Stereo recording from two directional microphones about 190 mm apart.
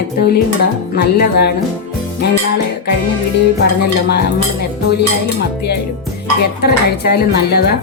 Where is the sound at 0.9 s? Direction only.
60° left (ahead or behind).